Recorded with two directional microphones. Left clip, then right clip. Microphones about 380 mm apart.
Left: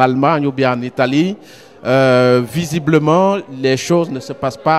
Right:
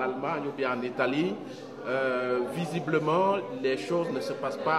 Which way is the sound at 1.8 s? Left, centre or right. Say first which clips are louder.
Left 17 dB; left.